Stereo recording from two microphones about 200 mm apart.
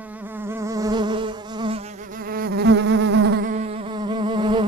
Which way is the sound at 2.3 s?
50° right (ahead or behind).